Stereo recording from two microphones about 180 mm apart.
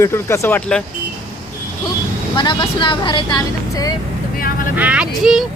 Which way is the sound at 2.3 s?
25° left (ahead or behind).